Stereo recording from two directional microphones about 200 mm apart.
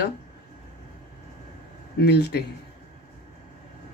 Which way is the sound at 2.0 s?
55° left (ahead or behind).